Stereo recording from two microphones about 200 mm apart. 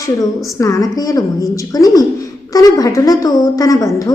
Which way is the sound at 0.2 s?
15° left (ahead or behind).